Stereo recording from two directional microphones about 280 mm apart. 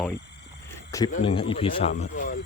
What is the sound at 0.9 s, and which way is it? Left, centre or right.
Speech, centre.